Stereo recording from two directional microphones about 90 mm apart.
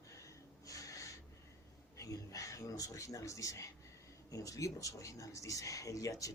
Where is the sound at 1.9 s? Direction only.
40° left (ahead or behind).